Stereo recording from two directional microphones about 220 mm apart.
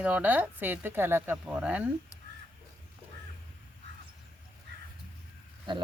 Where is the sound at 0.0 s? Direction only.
5° right (ahead or behind).